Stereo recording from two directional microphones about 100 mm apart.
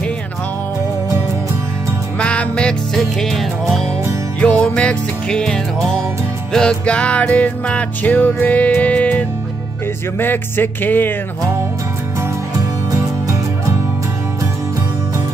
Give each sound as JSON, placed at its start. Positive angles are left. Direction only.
{"t": 2.1, "sound": "music", "side_deg": 10}
{"t": 4.4, "sound": "music", "side_deg": 10}
{"t": 12.2, "sound": "music", "side_deg": -35}